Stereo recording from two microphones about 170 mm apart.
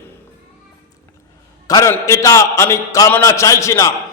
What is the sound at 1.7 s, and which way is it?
A man's voice, 20° left (ahead or behind).